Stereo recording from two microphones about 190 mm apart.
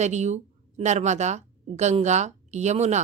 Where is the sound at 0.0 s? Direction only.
35° right (ahead or behind).